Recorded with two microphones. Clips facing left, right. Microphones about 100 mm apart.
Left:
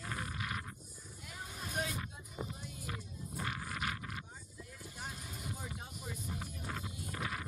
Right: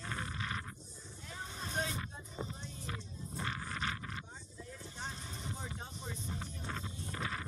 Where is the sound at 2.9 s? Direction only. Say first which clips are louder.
Even; 10° left (ahead or behind).